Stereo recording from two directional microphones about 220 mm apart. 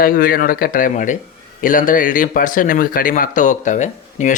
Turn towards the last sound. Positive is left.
turn(degrees=35)  # may be behind; listen again after turning